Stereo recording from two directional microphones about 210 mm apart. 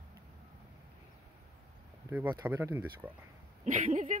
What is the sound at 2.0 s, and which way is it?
Speech, 10° right (ahead or behind).